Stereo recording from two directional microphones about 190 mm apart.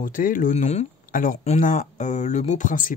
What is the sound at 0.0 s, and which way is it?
Speech, 45° left (ahead or behind).